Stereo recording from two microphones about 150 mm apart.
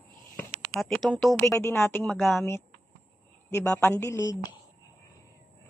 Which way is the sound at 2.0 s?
Centre (ahead or behind).